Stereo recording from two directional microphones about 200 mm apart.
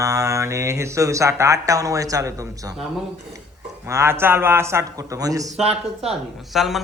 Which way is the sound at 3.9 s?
15° right (ahead or behind).